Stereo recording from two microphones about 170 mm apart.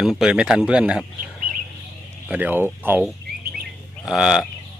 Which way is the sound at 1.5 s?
55° right (ahead or behind).